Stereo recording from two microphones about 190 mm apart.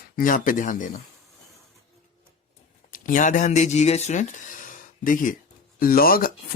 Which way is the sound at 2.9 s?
45° left (ahead or behind).